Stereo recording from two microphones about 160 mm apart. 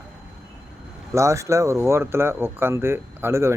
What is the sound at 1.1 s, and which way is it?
Speech, 20° right (ahead or behind).